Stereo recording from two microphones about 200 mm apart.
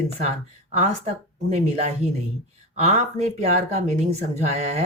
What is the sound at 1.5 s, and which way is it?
A woman's voice, 30° right (ahead or behind).